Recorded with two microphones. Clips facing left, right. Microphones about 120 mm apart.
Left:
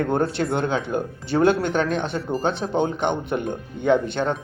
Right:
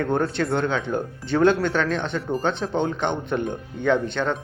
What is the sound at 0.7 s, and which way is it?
Speech, 10° left (ahead or behind).